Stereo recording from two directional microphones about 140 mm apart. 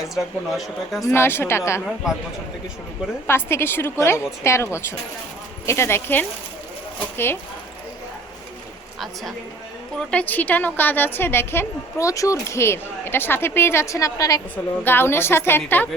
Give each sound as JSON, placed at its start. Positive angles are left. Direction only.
{"t": 0.0, "sound": "speech", "side_deg": 0}
{"t": 1.0, "sound": "a woman's voice", "side_deg": 15}
{"t": 3.2, "sound": "a woman's voice", "side_deg": 15}
{"t": 10.0, "sound": "a woman's voice", "side_deg": 10}